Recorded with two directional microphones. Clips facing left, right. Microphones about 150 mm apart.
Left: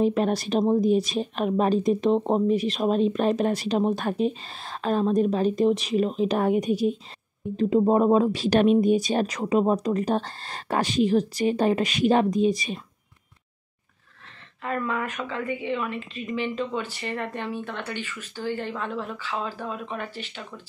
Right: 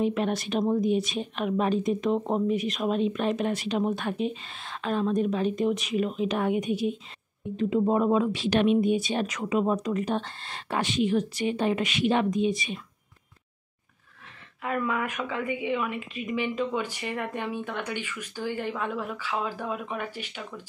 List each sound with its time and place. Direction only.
0.0 s a woman's voice: 35° left (ahead or behind)
14.6 s a woman's voice: 10° right (ahead or behind)